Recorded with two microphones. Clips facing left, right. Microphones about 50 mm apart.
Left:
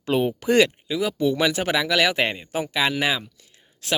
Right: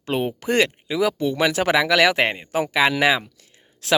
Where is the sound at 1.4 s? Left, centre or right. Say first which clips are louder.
Right 3 dB; right.